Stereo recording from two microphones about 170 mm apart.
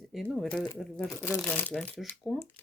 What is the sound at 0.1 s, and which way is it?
Speech, centre (ahead or behind).